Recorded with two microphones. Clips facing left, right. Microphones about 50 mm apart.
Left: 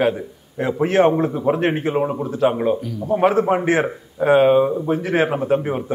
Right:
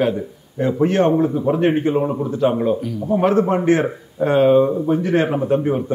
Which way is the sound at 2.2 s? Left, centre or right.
Centre.